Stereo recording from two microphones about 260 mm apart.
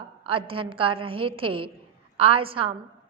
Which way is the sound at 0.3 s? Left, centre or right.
Centre.